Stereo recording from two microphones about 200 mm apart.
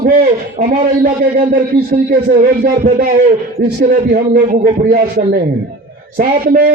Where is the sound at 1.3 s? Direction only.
45° right (ahead or behind).